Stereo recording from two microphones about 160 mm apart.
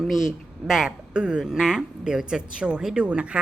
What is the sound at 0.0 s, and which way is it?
Speech, centre (ahead or behind).